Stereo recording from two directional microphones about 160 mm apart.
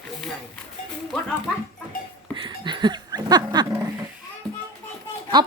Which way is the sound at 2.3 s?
30° right (ahead or behind).